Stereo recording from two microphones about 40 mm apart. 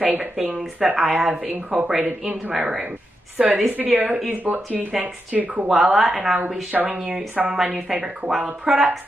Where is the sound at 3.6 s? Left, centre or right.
Right.